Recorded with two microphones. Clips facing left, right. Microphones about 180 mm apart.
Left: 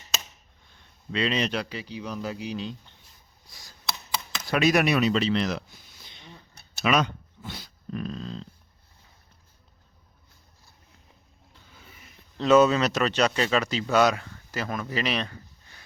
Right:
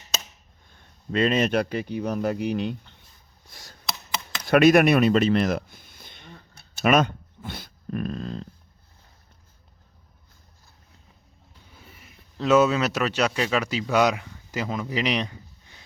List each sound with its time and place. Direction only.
0.7 s a man's voice: 50° right (ahead or behind)
3.5 s a sound: 65° right (ahead or behind)
4.4 s speech: 55° right (ahead or behind)
11.9 s speech: 5° right (ahead or behind)